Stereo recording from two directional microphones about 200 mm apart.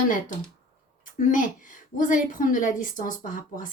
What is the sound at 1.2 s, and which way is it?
A woman's voice, 40° left (ahead or behind).